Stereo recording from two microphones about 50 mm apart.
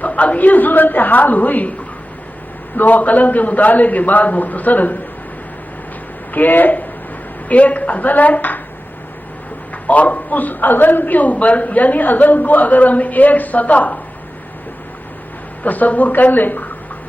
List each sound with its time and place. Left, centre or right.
0.0 s a man's voice: left
2.7 s a man's voice: left
6.3 s a man's voice: left
9.8 s a man's voice: left
15.6 s a man's voice: left